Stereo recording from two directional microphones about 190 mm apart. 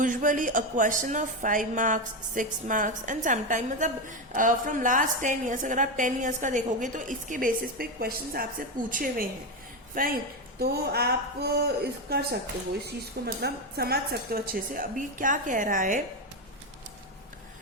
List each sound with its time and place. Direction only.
0.0 s a woman's voice: 45° right (ahead or behind)